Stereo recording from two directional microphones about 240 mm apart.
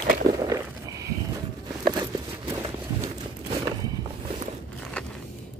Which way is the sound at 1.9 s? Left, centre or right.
Centre.